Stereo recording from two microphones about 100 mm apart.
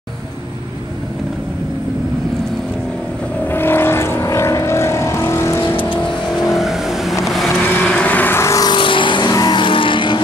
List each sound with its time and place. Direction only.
3.5 s vehicle: 20° left (ahead or behind)
6.5 s vehicle: 5° right (ahead or behind)
7.8 s vehicle: 10° left (ahead or behind); by 8.6 s 30° left (ahead or behind)
8.6 s vehicle: 55° left (ahead or behind)
9.3 s vehicle: 45° left (ahead or behind)